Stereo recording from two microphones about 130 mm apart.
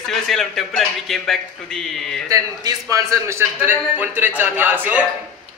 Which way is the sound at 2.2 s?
25° right (ahead or behind).